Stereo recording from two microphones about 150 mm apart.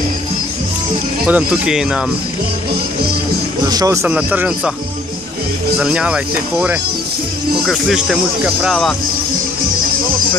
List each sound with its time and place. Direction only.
1.2 s speech: 10° right (ahead or behind)
3.6 s speech: 25° right (ahead or behind)
4.0 s speech: 10° right (ahead or behind)
5.8 s speech: 5° right (ahead or behind)